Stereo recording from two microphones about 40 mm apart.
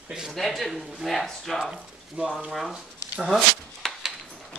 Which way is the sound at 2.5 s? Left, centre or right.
Centre.